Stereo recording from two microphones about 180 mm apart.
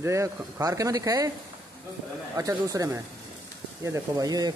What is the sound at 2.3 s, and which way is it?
Speech, 20° right (ahead or behind).